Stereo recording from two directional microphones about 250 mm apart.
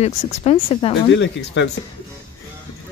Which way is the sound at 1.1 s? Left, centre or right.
Left.